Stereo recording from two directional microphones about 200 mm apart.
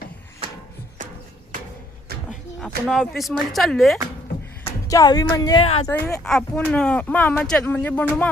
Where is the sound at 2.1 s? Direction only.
55° right (ahead or behind).